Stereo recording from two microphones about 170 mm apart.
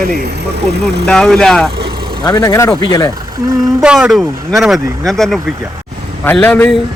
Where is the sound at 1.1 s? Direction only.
5° left (ahead or behind).